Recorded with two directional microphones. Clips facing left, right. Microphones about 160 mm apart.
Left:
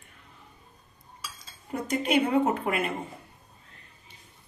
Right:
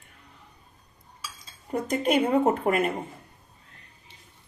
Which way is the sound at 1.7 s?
45° right (ahead or behind).